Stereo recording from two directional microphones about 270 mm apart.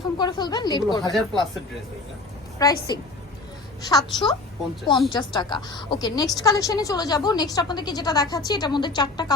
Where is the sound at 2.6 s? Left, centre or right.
Centre.